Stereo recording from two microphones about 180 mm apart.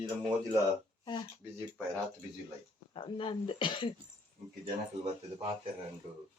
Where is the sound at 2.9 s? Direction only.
30° left (ahead or behind).